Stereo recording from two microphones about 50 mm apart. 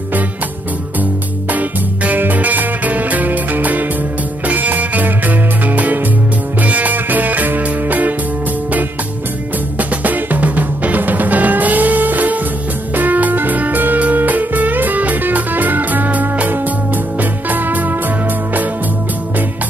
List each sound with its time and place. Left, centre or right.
1.5 s music: right
9.8 s music: right